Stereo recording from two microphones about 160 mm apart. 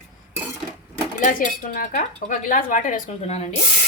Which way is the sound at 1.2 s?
55° left (ahead or behind).